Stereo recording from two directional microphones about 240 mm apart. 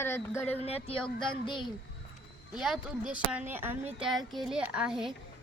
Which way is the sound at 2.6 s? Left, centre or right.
Centre.